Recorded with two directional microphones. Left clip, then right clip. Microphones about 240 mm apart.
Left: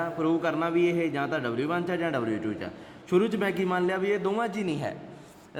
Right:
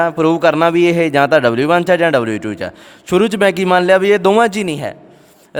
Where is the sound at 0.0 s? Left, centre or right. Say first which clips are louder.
Right 15 dB; right.